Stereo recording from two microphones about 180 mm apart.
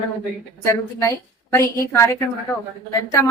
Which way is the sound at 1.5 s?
15° left (ahead or behind).